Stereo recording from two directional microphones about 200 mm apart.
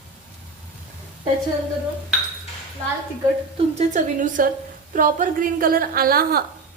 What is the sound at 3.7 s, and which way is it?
A woman's voice, 40° right (ahead or behind).